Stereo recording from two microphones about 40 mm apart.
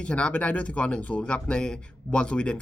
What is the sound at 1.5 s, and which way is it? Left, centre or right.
Speech, left.